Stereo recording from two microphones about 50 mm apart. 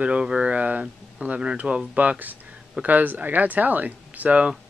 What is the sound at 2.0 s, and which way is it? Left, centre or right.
Speech, right.